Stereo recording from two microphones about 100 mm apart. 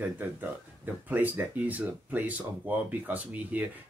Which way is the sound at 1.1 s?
15° right (ahead or behind).